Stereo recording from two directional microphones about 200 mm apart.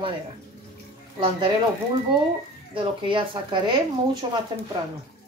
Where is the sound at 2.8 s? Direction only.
25° right (ahead or behind).